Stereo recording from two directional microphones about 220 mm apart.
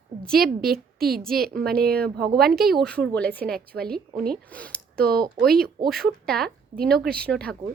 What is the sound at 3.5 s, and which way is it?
Speech, 45° right (ahead or behind).